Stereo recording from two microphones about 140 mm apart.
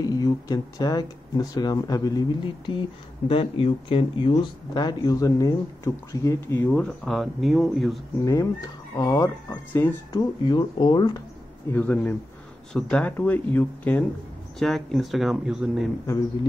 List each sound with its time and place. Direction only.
0.0 s speech: 25° left (ahead or behind)
4.3 s speech: 30° left (ahead or behind); by 8.0 s centre (ahead or behind)
8.3 s speech: 25° left (ahead or behind)
9.5 s speech: 15° left (ahead or behind)
10.1 s speech: 35° left (ahead or behind)
11.7 s speech: 10° left (ahead or behind); by 15.9 s 5° right (ahead or behind)